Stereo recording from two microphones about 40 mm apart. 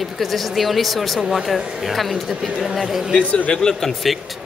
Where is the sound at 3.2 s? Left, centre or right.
Left.